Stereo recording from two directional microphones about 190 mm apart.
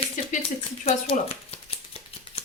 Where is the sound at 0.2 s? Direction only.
40° left (ahead or behind).